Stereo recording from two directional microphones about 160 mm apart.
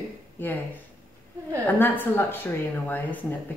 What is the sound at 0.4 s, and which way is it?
Speech, 10° left (ahead or behind).